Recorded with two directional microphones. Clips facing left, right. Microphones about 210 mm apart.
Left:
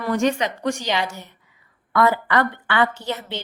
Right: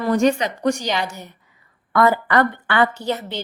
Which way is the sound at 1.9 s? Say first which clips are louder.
Right 2 dB; 45° right (ahead or behind).